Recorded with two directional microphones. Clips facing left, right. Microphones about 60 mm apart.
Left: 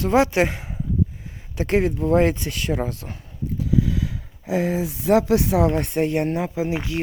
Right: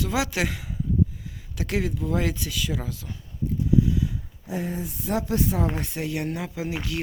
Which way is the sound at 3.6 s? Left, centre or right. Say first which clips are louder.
Even; left.